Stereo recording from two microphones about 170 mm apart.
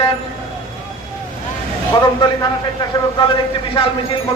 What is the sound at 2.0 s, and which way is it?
Speech, 25° left (ahead or behind).